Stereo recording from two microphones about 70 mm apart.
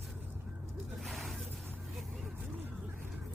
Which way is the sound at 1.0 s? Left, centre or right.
Centre.